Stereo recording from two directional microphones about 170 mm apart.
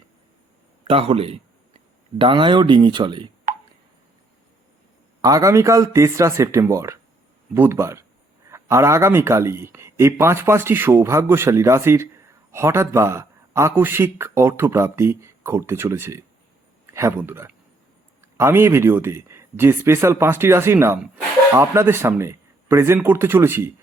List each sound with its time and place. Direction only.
0.9 s speech: 35° right (ahead or behind)
5.2 s speech: 20° right (ahead or behind)